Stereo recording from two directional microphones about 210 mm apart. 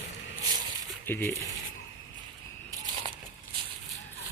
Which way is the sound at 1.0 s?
10° left (ahead or behind).